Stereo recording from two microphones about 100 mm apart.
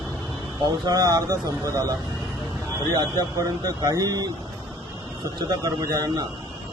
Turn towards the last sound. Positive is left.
turn(degrees=-40)  # may be behind; listen again after turning